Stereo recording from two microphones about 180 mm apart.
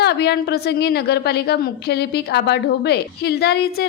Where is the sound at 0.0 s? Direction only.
65° left (ahead or behind).